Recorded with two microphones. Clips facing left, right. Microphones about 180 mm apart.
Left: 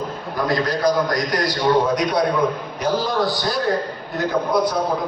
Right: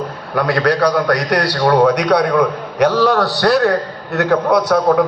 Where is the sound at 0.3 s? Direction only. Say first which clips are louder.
Right 6 dB; 70° right (ahead or behind).